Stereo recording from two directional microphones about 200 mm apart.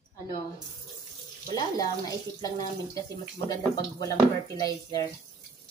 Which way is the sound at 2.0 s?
15° left (ahead or behind).